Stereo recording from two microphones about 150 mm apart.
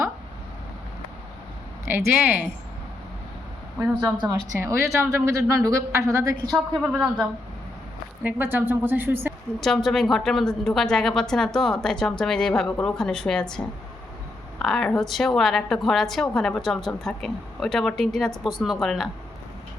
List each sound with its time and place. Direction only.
1.8 s a woman's voice: 15° right (ahead or behind)
4.0 s a woman's voice: 25° right (ahead or behind)
6.9 s a woman's voice: 5° right (ahead or behind)
9.6 s a woman's voice: centre (ahead or behind)